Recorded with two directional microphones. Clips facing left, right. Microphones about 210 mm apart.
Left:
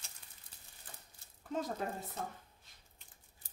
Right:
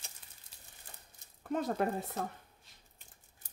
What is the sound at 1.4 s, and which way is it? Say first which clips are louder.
Speech: right 5 dB; 60° right (ahead or behind).